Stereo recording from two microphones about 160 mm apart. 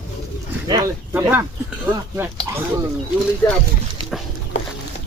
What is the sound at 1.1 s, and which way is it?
Speech, 15° right (ahead or behind).